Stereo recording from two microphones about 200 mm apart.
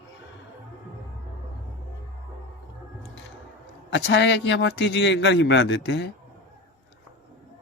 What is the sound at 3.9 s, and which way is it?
Speech, 60° left (ahead or behind).